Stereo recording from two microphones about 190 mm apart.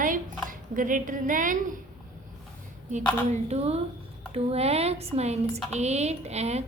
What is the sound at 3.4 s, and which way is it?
Speech, 35° right (ahead or behind).